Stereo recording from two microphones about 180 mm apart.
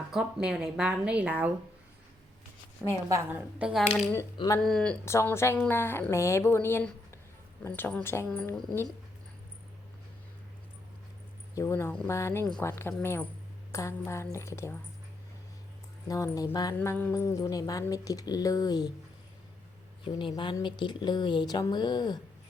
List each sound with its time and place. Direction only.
0.1 s speech: 5° right (ahead or behind)
3.1 s speech: 10° right (ahead or behind)
4.4 s speech: 20° left (ahead or behind)
4.6 s speech: 5° left (ahead or behind)
5.0 s a woman's voice: 15° left (ahead or behind)
11.5 s a woman's voice: 15° left (ahead or behind)
16.0 s speech: 20° left (ahead or behind)
20.1 s speech: 25° left (ahead or behind)